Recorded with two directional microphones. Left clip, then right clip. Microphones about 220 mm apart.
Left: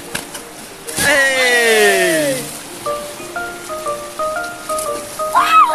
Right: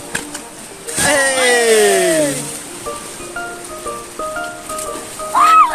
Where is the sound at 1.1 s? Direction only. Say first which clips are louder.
Left 1 dB; 10° right (ahead or behind).